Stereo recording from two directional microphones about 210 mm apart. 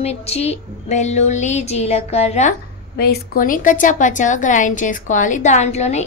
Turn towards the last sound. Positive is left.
turn(degrees=30)  # may be behind; listen again after turning